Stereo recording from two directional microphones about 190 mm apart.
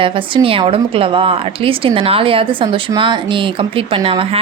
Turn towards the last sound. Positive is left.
turn(degrees=-30)  # may be behind; listen again after turning